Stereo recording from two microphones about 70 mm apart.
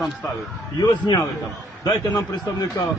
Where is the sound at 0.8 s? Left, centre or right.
Left.